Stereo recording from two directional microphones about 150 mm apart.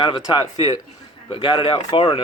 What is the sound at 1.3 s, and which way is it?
Speech, 35° left (ahead or behind).